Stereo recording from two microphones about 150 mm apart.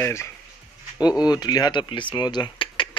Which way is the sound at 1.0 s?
25° left (ahead or behind).